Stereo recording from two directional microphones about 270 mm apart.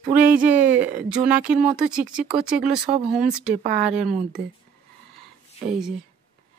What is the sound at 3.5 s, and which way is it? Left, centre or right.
Speech, right.